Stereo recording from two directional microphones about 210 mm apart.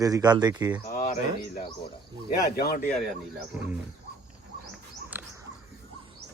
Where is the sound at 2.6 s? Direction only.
50° left (ahead or behind).